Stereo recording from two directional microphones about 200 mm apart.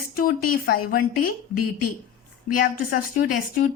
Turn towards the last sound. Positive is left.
turn(degrees=50)  # may be behind; listen again after turning